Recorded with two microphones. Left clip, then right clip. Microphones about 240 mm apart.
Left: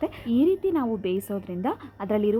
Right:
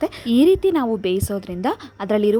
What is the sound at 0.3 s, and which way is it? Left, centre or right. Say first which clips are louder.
A woman's voice: right 7 dB; right.